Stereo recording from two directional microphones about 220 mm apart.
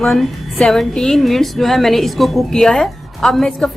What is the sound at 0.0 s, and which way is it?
A woman's voice, centre (ahead or behind).